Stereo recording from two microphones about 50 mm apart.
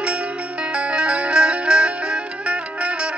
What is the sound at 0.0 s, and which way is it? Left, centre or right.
Music, right.